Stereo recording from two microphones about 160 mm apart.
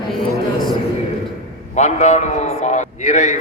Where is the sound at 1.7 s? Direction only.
45° left (ahead or behind).